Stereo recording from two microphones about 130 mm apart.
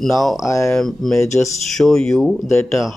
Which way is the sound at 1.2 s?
25° left (ahead or behind).